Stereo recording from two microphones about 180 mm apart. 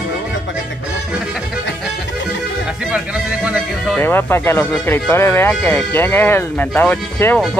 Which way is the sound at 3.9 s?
10° left (ahead or behind).